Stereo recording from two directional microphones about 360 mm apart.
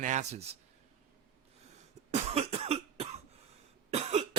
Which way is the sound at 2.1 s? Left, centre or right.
Centre.